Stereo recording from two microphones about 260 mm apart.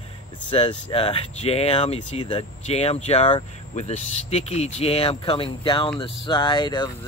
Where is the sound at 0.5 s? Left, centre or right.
Centre.